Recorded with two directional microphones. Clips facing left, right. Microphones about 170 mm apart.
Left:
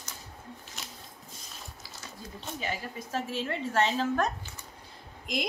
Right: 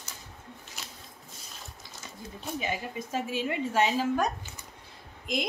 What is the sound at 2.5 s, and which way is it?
A woman's voice, 15° right (ahead or behind).